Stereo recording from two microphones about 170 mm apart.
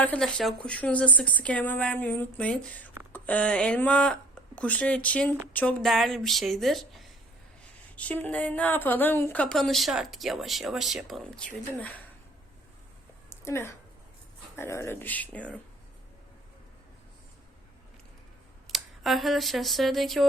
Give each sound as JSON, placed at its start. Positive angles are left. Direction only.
{"t": 0.0, "sound": "speech", "side_deg": 5}
{"t": 13.3, "sound": "speech", "side_deg": 15}
{"t": 18.7, "sound": "speech", "side_deg": 0}